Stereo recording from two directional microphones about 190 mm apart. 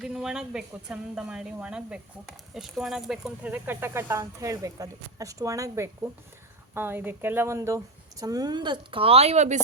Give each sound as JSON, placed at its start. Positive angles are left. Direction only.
{"t": 0.0, "sound": "speech", "side_deg": 0}